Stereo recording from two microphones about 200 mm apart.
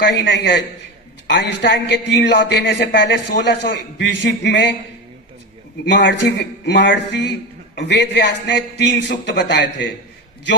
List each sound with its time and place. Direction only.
0.1 s a man's voice: 60° left (ahead or behind)
5.8 s a man's voice: 60° left (ahead or behind)